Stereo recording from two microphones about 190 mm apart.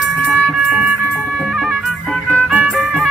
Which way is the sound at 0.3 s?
5° right (ahead or behind).